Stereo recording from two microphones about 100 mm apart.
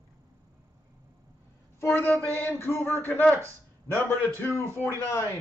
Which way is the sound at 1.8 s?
20° left (ahead or behind).